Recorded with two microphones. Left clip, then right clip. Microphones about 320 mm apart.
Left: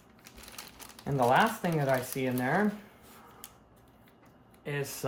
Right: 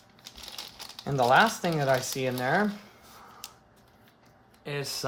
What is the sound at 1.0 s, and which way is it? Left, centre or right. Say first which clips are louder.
Speech: right 4 dB; right.